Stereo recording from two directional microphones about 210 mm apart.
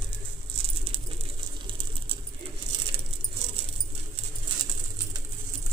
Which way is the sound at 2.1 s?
25° right (ahead or behind).